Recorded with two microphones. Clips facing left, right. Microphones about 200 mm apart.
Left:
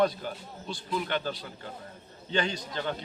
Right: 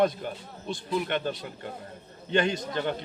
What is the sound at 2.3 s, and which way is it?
Speech, 55° right (ahead or behind).